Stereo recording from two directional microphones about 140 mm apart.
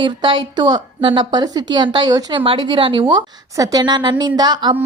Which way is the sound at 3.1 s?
25° right (ahead or behind).